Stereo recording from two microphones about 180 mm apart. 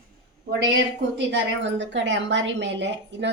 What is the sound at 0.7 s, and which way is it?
A woman's voice, 80° right.